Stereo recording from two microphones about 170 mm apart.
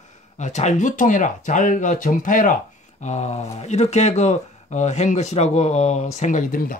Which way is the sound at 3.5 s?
40° left (ahead or behind).